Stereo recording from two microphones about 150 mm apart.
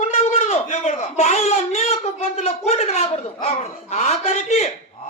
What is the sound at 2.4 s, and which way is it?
Speech, 45° left (ahead or behind).